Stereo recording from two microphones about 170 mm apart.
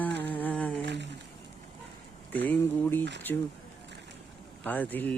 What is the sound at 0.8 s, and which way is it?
Speech, 90° right.